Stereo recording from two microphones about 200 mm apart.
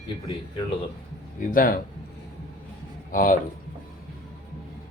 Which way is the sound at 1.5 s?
45° left (ahead or behind).